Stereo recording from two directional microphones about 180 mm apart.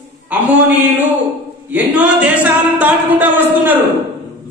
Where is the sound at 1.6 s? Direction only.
10° right (ahead or behind).